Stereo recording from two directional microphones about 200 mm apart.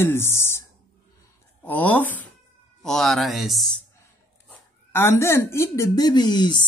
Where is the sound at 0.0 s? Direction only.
10° left (ahead or behind).